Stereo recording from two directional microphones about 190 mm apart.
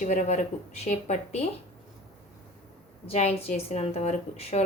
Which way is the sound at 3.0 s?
35° left (ahead or behind).